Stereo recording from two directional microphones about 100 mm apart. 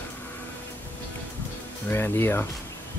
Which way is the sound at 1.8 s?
20° left (ahead or behind).